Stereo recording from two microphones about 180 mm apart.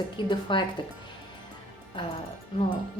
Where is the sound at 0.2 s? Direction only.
25° left (ahead or behind).